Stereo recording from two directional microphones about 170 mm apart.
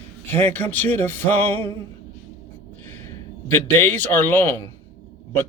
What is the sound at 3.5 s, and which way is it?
Speech, 10° left (ahead or behind).